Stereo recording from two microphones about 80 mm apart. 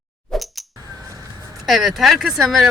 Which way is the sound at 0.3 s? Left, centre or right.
Centre.